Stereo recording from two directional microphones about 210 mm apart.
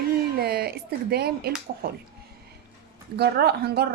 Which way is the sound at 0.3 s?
45° right (ahead or behind).